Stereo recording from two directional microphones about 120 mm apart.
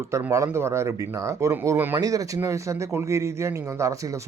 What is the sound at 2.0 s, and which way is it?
Speech, 30° right (ahead or behind).